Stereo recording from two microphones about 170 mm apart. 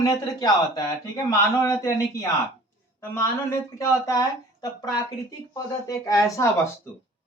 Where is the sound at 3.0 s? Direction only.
15° left (ahead or behind).